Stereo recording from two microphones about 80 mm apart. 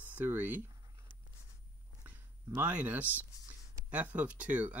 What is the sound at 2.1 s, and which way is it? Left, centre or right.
Speech, centre.